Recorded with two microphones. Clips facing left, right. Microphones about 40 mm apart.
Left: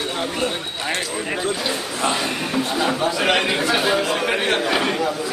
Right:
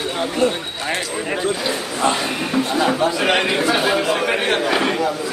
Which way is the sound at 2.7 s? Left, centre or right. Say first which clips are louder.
Right 3 dB; centre.